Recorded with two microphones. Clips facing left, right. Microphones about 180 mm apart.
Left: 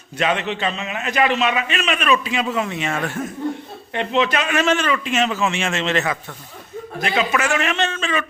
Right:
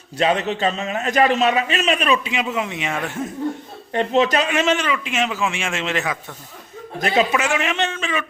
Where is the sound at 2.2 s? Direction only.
15° right (ahead or behind).